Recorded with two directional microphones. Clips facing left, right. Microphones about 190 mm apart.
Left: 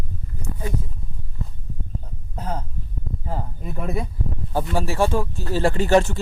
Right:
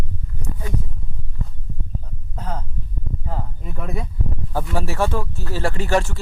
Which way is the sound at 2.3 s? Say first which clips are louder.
Left 1 dB; 10° left (ahead or behind).